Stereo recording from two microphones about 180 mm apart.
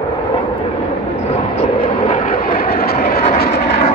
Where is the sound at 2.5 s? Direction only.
55° left (ahead or behind).